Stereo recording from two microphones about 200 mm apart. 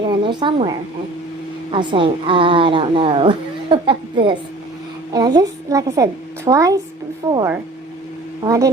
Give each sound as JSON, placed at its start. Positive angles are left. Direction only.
{"t": 0.0, "sound": "a woman's voice", "side_deg": -20}
{"t": 1.7, "sound": "a woman's voice", "side_deg": -25}